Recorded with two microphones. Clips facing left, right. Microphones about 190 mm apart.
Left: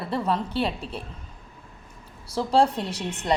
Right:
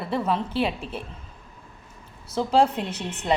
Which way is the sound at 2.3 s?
30° left (ahead or behind).